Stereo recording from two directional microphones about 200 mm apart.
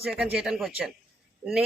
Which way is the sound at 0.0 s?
5° right (ahead or behind).